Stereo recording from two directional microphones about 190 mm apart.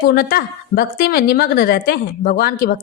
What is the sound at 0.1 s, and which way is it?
Speech, 50° left (ahead or behind).